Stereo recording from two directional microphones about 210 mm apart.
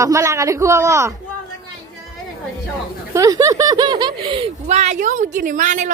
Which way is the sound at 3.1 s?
15° right (ahead or behind).